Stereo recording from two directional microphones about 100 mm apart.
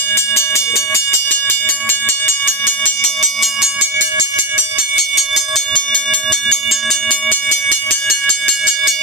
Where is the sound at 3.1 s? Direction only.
Centre (ahead or behind).